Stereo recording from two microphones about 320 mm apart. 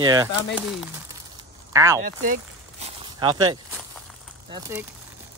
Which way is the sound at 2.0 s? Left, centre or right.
Right.